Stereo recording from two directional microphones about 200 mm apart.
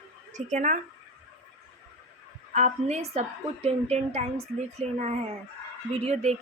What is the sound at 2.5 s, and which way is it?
A woman's voice, 35° right (ahead or behind).